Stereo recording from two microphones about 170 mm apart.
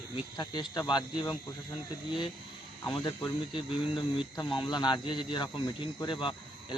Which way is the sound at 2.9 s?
25° left (ahead or behind).